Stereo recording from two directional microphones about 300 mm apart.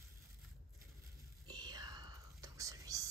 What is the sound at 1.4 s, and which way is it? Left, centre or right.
Whispering, centre.